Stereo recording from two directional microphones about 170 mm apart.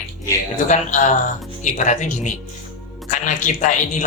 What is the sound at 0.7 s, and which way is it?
Speech, 45° left (ahead or behind).